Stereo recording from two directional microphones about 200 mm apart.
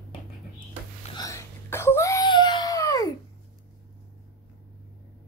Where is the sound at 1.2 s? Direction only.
15° left (ahead or behind).